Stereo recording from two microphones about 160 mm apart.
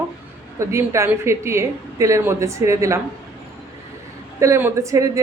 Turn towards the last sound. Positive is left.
turn(degrees=-20)  # may be behind; listen again after turning